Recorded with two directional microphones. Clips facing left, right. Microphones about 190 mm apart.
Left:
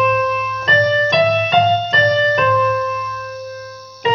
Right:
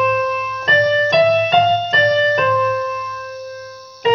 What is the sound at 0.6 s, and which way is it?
Music, 35° right (ahead or behind).